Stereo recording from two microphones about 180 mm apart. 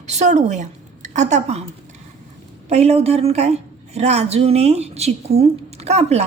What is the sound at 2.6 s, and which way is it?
A woman's voice, 35° right (ahead or behind).